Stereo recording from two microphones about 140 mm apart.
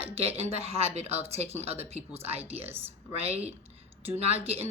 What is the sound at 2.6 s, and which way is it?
Speech, 15° right (ahead or behind).